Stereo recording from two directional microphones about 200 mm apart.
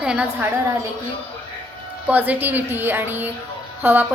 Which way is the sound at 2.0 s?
10° right (ahead or behind).